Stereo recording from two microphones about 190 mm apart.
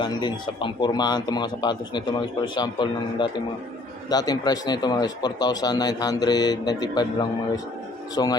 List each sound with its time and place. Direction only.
0.0 s speech: 25° left (ahead or behind)